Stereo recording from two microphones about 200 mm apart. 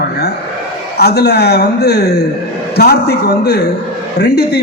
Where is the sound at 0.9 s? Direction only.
55° left (ahead or behind).